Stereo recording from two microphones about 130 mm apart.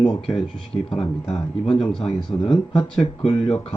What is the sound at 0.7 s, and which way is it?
Speech, 30° left (ahead or behind).